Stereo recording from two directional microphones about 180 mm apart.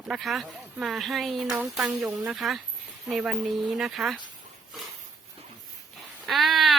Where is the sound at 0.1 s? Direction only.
Centre (ahead or behind).